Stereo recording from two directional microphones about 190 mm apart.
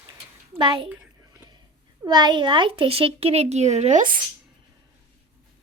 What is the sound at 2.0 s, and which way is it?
Speech, 25° right (ahead or behind).